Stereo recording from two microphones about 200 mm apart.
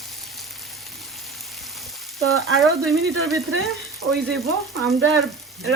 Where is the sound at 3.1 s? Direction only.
90° right.